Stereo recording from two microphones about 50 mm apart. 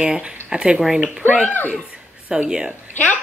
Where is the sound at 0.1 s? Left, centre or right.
Centre.